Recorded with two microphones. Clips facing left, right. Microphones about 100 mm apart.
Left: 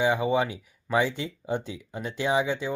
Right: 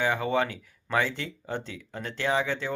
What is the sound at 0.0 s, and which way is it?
Speech, 15° left (ahead or behind).